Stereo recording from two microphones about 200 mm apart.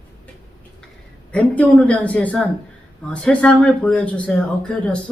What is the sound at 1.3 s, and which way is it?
Speech, 5° left (ahead or behind).